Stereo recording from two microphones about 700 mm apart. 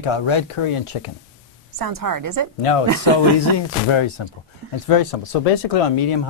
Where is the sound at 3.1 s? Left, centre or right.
Left.